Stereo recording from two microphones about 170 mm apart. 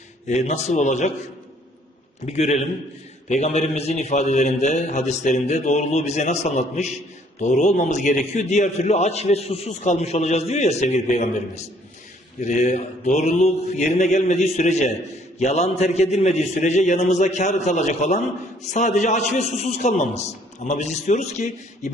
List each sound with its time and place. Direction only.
0.3 s a man's voice: 40° left (ahead or behind)
2.2 s a man's voice: 40° left (ahead or behind)